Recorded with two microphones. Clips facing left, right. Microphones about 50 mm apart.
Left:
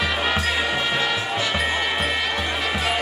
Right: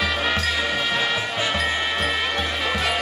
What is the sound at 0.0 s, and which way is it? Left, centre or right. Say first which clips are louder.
Music: even; centre.